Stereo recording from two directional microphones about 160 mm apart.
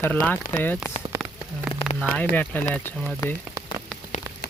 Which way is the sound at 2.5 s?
10° left (ahead or behind).